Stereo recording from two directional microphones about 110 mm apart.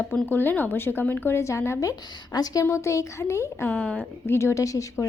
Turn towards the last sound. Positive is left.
turn(degrees=30)  # may be behind; listen again after turning